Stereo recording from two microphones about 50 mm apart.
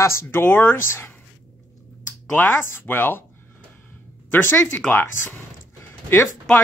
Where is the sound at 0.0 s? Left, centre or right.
Left.